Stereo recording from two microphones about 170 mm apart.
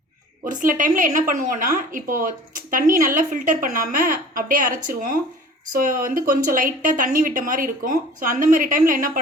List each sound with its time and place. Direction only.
0.4 s a woman's voice: 50° right (ahead or behind)